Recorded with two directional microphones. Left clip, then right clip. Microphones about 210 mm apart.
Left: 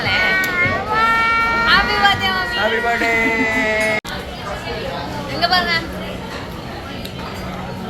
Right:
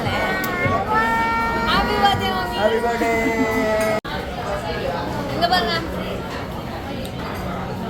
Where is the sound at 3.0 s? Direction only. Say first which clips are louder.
Left 3 dB; 20° right (ahead or behind).